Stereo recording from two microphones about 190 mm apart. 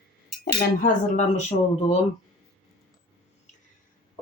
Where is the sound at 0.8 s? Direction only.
35° left (ahead or behind).